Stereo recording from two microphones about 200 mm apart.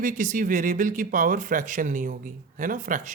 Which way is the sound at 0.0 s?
40° right (ahead or behind).